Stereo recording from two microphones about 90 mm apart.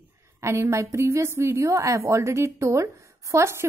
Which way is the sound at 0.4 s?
30° right (ahead or behind).